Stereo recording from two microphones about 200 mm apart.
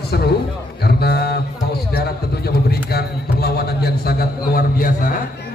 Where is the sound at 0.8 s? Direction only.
50° left (ahead or behind).